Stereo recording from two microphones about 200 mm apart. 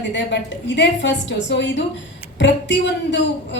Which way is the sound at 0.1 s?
65° left (ahead or behind).